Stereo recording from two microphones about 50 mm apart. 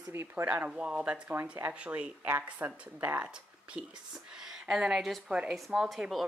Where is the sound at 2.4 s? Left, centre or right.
Right.